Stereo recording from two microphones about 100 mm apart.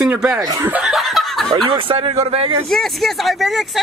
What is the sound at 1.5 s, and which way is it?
Speech, 50° right (ahead or behind).